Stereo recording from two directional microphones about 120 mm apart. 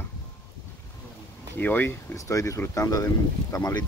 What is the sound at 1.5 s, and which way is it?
Speech, 15° left (ahead or behind).